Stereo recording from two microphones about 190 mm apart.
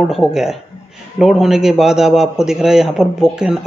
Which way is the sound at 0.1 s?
Centre (ahead or behind).